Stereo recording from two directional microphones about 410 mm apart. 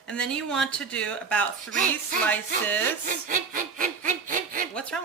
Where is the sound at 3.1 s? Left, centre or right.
Centre.